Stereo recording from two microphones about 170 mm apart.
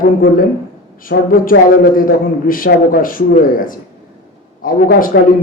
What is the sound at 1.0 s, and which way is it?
A man's voice, 55° left (ahead or behind).